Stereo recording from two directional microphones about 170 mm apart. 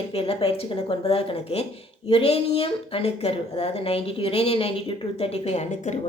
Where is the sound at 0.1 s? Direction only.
35° left (ahead or behind).